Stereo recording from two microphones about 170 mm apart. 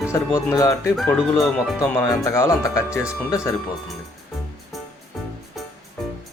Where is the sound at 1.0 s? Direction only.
5° left (ahead or behind).